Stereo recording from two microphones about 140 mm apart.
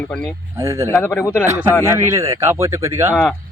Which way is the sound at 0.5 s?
20° right (ahead or behind).